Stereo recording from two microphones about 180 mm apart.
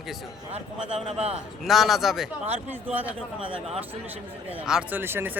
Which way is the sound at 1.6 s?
Centre (ahead or behind).